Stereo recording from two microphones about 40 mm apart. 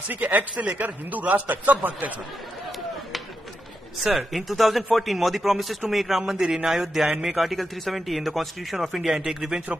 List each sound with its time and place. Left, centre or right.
0.1 s a man's voice: right
4.0 s a man's voice: centre